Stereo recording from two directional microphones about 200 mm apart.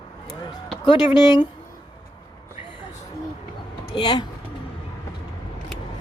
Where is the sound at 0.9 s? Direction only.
20° left (ahead or behind).